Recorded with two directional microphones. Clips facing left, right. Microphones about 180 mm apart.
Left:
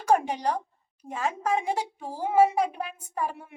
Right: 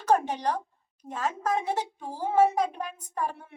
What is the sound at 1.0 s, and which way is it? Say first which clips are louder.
A woman's voice: left 1 dB; 10° left (ahead or behind).